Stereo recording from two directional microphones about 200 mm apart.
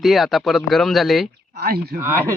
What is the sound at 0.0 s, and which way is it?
A man's voice, centre (ahead or behind).